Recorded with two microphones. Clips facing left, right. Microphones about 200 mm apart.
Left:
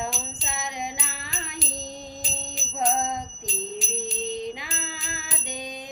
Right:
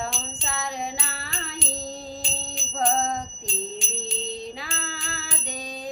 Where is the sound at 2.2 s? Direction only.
Centre (ahead or behind).